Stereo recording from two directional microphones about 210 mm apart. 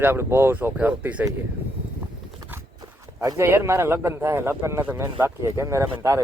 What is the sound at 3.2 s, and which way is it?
Speech, 15° right (ahead or behind).